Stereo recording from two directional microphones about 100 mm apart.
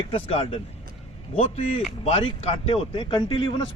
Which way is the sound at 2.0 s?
85° left.